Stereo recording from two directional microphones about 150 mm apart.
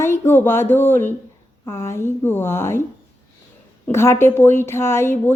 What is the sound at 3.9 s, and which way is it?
A woman's voice, 15° left (ahead or behind).